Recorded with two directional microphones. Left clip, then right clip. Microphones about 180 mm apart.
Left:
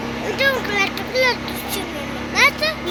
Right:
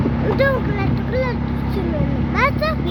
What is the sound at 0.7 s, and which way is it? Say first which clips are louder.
Speech: left 3 dB; 10° right (ahead or behind).